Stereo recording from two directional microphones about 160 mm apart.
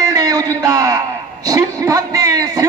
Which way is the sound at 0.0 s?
25° right (ahead or behind).